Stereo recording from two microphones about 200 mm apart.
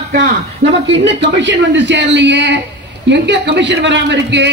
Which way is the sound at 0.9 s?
60° right (ahead or behind).